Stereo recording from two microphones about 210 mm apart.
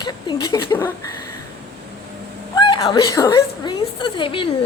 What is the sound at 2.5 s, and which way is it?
A woman's voice, 20° left (ahead or behind).